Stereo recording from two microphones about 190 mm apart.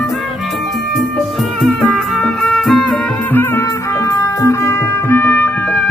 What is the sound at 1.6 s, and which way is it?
Music, centre (ahead or behind).